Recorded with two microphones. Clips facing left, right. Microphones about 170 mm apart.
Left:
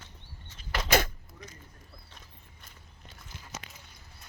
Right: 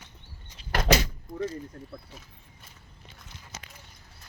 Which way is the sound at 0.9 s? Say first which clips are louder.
Right 2 dB; 55° left (ahead or behind).